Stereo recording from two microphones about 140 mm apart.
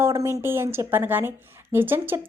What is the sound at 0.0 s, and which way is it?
A woman's voice, 20° right (ahead or behind).